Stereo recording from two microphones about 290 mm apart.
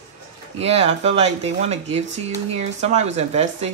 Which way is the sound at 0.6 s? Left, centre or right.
Right.